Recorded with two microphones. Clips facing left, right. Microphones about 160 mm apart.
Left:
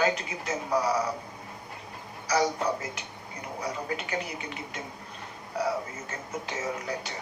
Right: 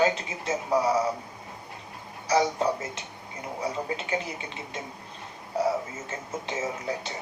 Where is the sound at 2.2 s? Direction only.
25° right (ahead or behind).